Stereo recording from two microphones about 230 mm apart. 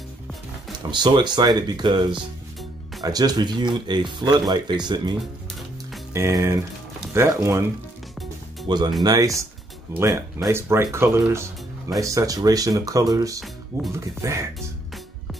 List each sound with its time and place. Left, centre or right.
0.8 s speech: centre
3.0 s speech: centre
6.1 s speech: centre
8.6 s speech: centre